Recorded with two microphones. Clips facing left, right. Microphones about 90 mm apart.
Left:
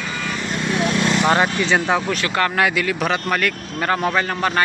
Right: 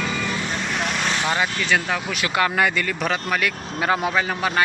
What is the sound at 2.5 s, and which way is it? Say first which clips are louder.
Speech: left 2 dB; 5° left (ahead or behind).